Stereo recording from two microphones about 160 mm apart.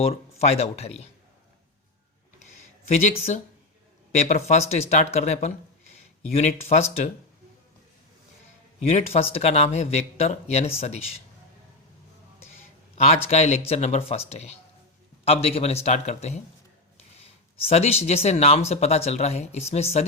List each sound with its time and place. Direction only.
0.0 s speech: 40° left (ahead or behind)
2.9 s speech: 45° left (ahead or behind)
4.4 s speech: 40° left (ahead or behind)
8.8 s speech: 45° left (ahead or behind)
13.0 s speech: 45° left (ahead or behind)
17.7 s speech: 40° left (ahead or behind)